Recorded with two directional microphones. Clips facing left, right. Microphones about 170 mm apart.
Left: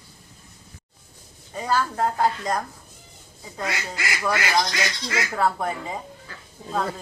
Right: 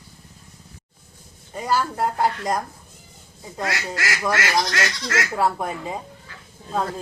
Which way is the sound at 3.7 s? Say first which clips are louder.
Right 3 dB; 80° right.